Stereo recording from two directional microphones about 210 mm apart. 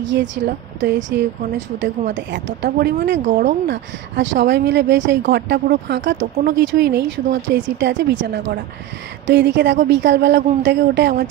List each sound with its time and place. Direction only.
0.0 s a woman's voice: 60° right (ahead or behind)
3.3 s speech: 40° right (ahead or behind)
3.6 s speech: 60° right (ahead or behind)
6.3 s speech: 50° right (ahead or behind)
7.8 s speech: 60° right (ahead or behind)